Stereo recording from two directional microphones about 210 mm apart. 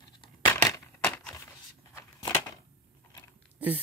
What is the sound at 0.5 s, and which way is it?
Crushing, 5° left (ahead or behind).